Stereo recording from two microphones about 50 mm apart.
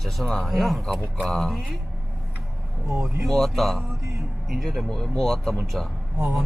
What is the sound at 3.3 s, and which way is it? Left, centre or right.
A man's voice, centre.